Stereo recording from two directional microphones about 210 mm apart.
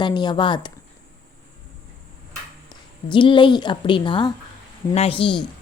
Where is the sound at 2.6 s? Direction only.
25° left (ahead or behind).